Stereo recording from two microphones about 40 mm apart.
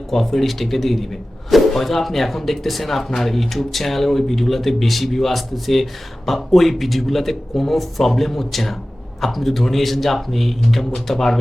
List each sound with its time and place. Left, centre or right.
0.1 s speech: centre